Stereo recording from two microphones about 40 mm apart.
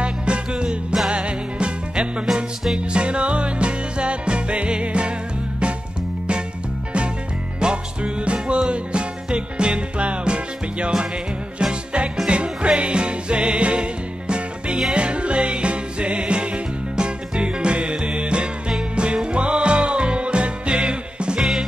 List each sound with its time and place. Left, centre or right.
0.0 s music: right
7.6 s music: right
12.3 s music: right